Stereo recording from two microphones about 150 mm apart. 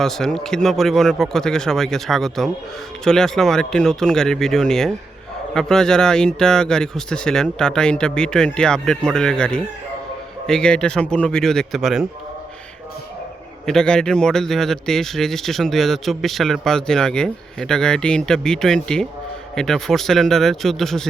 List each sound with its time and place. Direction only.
0.0 s speech: 5° left (ahead or behind)
13.7 s speech: 5° left (ahead or behind)